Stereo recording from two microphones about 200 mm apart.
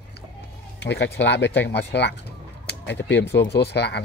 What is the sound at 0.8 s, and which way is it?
Speech, 60° left (ahead or behind).